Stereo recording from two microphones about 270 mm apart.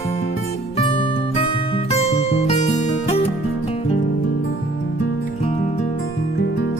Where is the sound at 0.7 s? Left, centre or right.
Left.